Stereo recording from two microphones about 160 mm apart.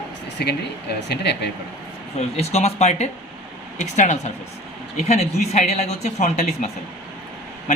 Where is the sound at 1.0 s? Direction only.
90° left.